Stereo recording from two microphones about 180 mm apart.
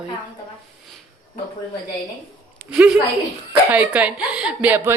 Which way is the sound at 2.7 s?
5° right (ahead or behind).